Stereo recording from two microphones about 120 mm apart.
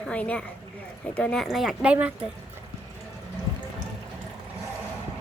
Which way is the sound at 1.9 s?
10° right (ahead or behind).